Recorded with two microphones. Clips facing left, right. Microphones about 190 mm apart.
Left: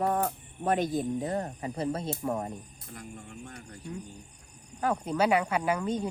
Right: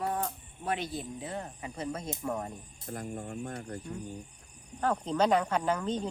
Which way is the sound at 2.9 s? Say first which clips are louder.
Right 6 dB; 50° right (ahead or behind).